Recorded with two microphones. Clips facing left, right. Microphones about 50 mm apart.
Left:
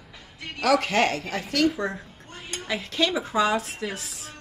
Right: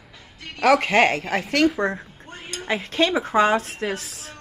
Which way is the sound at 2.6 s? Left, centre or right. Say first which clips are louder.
Right 4 dB; right.